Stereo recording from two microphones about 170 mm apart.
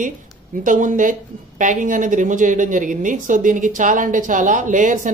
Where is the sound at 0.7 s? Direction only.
50° right (ahead or behind).